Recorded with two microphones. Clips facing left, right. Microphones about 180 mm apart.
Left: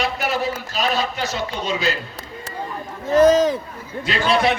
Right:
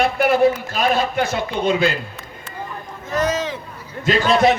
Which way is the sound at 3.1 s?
30° left (ahead or behind).